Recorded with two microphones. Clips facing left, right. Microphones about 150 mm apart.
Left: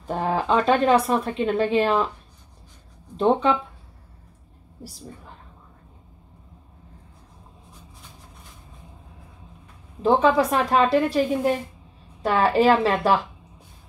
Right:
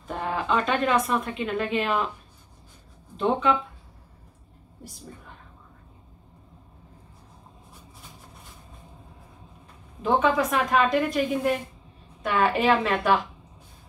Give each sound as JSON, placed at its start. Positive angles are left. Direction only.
{"t": 0.0, "sound": "a woman's voice", "side_deg": 35}
{"t": 3.2, "sound": "a woman's voice", "side_deg": 35}
{"t": 10.0, "sound": "a woman's voice", "side_deg": 35}